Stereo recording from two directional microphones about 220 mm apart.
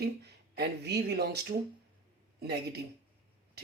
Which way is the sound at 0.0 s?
45° right (ahead or behind).